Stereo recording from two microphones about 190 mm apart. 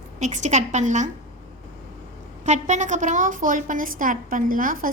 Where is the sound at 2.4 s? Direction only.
40° right (ahead or behind).